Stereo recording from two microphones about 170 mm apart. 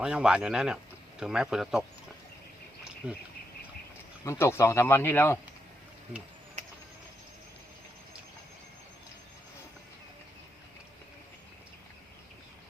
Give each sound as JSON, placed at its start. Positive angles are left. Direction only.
{"t": 0.0, "sound": "speech", "side_deg": -5}
{"t": 3.0, "sound": "speech", "side_deg": -5}
{"t": 4.2, "sound": "speech", "side_deg": 15}
{"t": 6.6, "sound": "a sound", "side_deg": -45}